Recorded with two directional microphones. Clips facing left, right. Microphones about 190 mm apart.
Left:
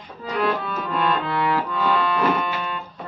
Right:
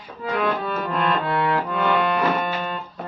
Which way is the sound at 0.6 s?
50° right (ahead or behind).